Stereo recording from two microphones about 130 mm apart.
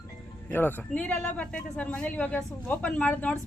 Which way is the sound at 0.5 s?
15° left (ahead or behind).